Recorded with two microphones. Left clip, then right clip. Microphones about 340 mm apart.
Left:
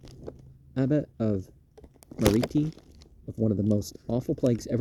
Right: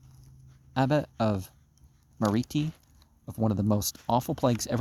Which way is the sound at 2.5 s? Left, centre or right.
Centre.